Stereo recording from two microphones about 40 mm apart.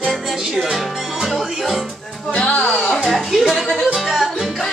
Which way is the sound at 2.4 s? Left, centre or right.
Left.